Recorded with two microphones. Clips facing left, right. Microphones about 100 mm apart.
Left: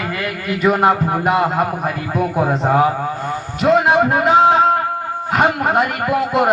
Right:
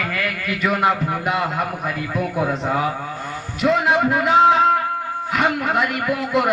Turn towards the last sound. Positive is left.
turn(degrees=40)  # may be behind; listen again after turning